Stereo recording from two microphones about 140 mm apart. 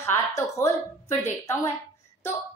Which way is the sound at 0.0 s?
15° left (ahead or behind).